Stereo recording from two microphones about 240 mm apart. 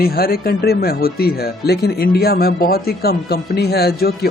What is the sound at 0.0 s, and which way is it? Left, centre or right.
Speech, left.